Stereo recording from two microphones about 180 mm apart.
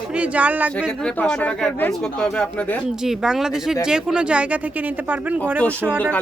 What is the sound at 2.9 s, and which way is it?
A man's voice, 5° right (ahead or behind).